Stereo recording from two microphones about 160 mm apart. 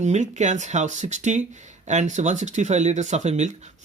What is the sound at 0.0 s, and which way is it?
Speech, 45° right (ahead or behind).